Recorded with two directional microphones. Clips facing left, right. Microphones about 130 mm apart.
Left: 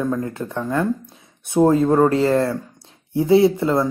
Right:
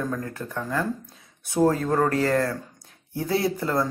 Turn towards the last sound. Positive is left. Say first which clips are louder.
# left 9 dB
turn(degrees=25)  # may be behind; listen again after turning